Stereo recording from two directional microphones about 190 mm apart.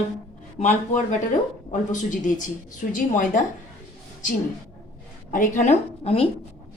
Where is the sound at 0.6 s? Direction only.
40° left (ahead or behind).